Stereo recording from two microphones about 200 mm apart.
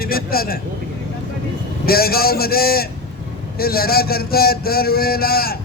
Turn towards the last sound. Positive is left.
turn(degrees=50)  # may be behind; listen again after turning